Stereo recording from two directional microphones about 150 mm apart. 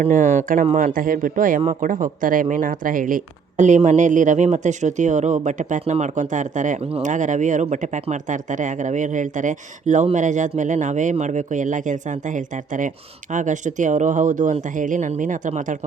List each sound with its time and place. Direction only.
0.0 s speech: 60° right (ahead or behind)